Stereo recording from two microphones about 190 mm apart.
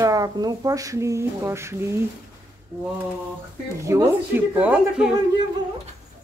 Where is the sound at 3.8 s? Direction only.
15° right (ahead or behind).